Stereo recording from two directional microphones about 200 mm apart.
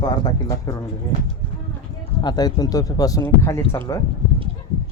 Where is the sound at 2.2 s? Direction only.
20° left (ahead or behind).